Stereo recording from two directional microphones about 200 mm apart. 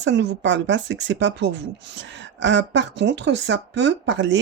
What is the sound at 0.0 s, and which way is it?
Speech, 60° right (ahead or behind).